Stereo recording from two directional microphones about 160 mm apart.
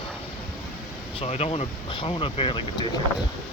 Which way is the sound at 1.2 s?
40° left (ahead or behind).